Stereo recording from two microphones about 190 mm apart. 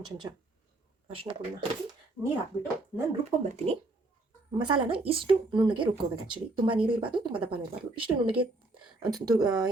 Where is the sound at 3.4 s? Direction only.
35° right (ahead or behind).